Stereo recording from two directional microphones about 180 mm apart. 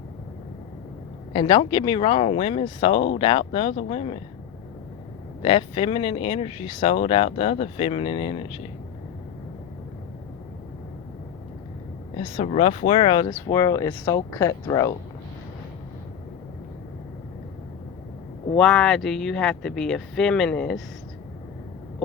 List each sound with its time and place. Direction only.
1.3 s speech: 25° left (ahead or behind)
5.4 s speech: 30° left (ahead or behind)
12.1 s speech: 35° left (ahead or behind); by 14.9 s 20° left (ahead or behind)
18.5 s speech: 5° left (ahead or behind)